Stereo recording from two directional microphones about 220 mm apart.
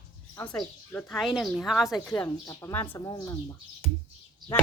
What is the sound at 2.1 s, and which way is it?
Speech, 15° left (ahead or behind).